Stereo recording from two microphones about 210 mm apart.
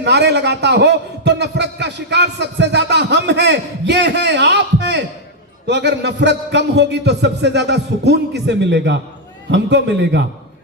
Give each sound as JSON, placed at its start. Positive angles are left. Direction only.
{"t": 0.0, "sound": "a man's voice", "side_deg": -55}